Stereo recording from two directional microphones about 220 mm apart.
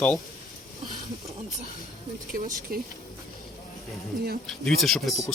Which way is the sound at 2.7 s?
40° right (ahead or behind).